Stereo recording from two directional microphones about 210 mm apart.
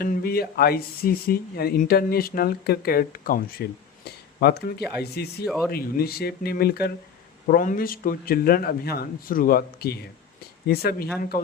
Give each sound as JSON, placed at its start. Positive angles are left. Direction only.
{"t": 0.0, "sound": "speech", "side_deg": 45}
{"t": 5.5, "sound": "speech", "side_deg": 0}
{"t": 5.7, "sound": "speech", "side_deg": 45}